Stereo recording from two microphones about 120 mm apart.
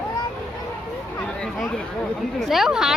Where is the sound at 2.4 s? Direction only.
Centre (ahead or behind).